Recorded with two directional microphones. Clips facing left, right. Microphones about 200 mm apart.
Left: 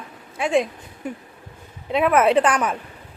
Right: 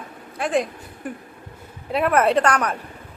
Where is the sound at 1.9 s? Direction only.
Centre (ahead or behind).